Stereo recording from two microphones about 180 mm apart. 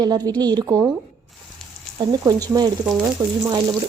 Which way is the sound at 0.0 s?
20° right (ahead or behind).